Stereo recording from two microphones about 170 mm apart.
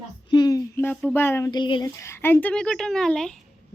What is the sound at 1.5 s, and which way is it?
Speech, 25° left (ahead or behind).